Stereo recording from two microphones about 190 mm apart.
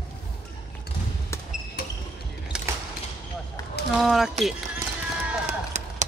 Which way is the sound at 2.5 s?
5° right (ahead or behind).